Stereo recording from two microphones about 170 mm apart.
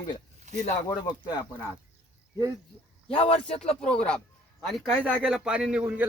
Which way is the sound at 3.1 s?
35° left (ahead or behind).